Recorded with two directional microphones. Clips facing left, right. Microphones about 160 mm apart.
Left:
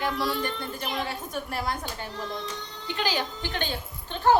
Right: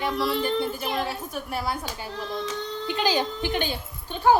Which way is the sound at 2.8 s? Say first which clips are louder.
Right 4 dB; 20° right (ahead or behind).